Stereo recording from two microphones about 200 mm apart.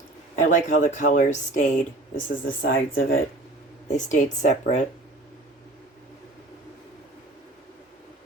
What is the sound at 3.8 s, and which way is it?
Speech, 40° left (ahead or behind).